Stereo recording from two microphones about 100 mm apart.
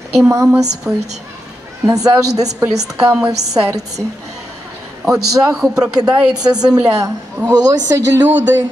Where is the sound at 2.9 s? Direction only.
10° right (ahead or behind).